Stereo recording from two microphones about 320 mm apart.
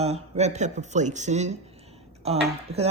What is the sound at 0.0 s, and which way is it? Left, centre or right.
Speech, centre.